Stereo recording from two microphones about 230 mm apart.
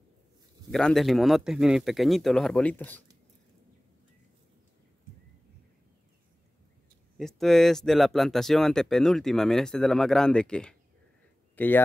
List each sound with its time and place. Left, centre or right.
0.7 s speech: centre
7.2 s speech: centre